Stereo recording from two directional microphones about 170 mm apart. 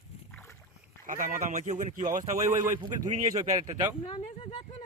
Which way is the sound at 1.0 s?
50° right (ahead or behind).